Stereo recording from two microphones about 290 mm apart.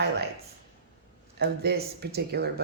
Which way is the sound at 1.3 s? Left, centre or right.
Right.